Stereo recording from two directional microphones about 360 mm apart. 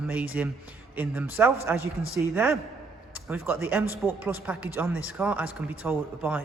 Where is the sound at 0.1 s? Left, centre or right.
Centre.